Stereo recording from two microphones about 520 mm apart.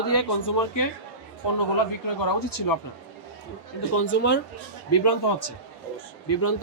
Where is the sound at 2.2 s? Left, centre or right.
Left.